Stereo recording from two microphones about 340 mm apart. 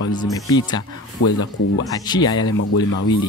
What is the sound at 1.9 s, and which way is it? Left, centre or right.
Speech, centre.